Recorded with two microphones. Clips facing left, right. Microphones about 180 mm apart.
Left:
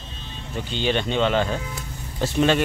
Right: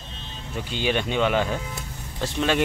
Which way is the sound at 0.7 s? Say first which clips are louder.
Left 1 dB; 10° right (ahead or behind).